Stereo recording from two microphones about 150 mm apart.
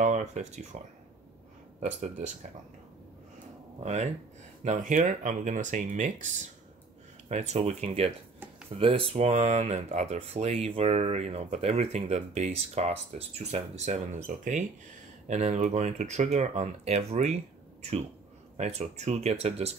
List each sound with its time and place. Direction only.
0.0 s speech: 55° right (ahead or behind)
1.8 s speech: 55° right (ahead or behind)
3.8 s speech: 50° right (ahead or behind)
18.6 s speech: 45° right (ahead or behind)